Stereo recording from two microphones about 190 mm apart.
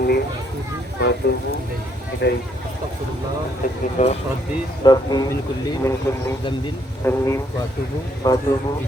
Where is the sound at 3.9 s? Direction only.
35° left (ahead or behind).